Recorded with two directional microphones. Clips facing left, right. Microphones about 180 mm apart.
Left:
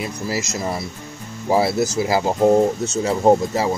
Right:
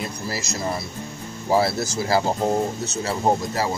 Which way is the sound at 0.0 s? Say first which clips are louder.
Left 4 dB; 15° left (ahead or behind).